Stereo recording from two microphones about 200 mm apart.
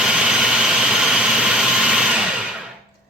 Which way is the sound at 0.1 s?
5° right (ahead or behind).